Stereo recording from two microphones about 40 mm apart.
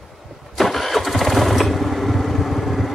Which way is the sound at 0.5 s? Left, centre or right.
Centre.